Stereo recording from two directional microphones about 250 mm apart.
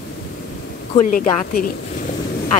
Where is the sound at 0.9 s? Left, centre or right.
Left.